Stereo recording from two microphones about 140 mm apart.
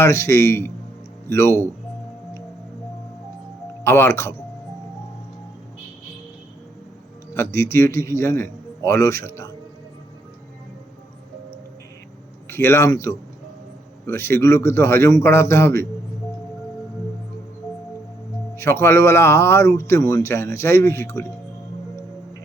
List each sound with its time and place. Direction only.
0.0 s speech: 20° left (ahead or behind)
3.8 s speech: 15° left (ahead or behind)
7.3 s speech: 20° left (ahead or behind)
12.5 s speech: 15° left (ahead or behind)
18.5 s speech: 20° left (ahead or behind)